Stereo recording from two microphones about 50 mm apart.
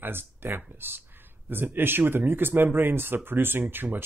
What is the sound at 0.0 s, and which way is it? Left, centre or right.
Speech, right.